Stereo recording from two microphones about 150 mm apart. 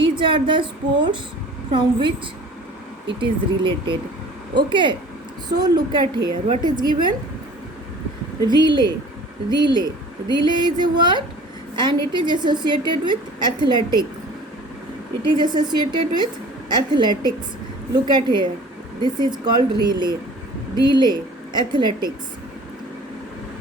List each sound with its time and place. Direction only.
0.0 s a woman's voice: 35° right (ahead or behind)
3.2 s a woman's voice: 35° right (ahead or behind)
8.4 s a woman's voice: 30° right (ahead or behind)
15.3 s a woman's voice: 30° right (ahead or behind)